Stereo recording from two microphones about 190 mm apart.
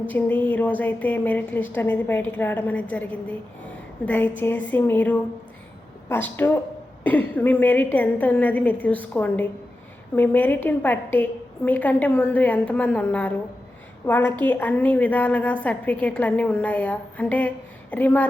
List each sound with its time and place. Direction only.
0.1 s a woman's voice: 10° left (ahead or behind)